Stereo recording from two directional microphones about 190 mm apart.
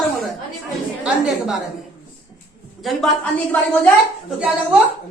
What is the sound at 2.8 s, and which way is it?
Speech, centre (ahead or behind).